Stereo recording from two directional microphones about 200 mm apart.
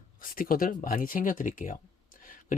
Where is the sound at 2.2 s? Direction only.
40° left (ahead or behind).